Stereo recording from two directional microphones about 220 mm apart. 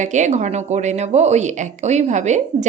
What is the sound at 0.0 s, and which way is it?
A woman's voice, 35° right (ahead or behind).